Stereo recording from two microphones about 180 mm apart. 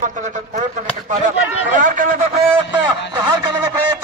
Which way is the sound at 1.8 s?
45° right (ahead or behind).